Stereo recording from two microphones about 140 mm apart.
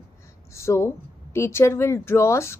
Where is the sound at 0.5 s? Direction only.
20° left (ahead or behind).